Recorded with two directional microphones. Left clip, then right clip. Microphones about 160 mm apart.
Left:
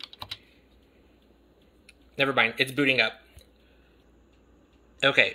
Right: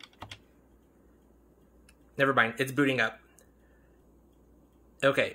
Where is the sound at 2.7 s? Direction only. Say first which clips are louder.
Left 4 dB; 20° right (ahead or behind).